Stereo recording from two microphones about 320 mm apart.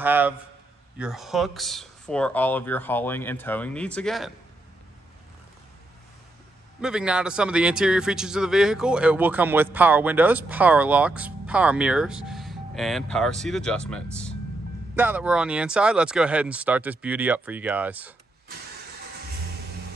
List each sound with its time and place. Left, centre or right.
0.0 s a man's voice: centre
6.8 s a man's voice: centre